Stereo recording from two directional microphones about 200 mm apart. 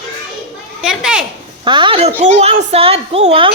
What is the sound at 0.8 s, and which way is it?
Speech, 5° right (ahead or behind).